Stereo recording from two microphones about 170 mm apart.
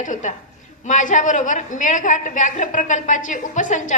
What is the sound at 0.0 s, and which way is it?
A woman's voice, 50° left (ahead or behind).